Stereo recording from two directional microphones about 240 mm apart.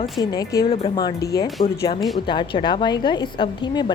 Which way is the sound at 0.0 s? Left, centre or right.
Centre.